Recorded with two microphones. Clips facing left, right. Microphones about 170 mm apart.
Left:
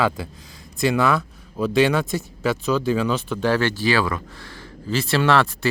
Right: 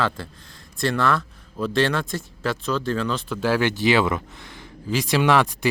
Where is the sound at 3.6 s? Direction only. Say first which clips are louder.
Right 1 dB; 20° right (ahead or behind).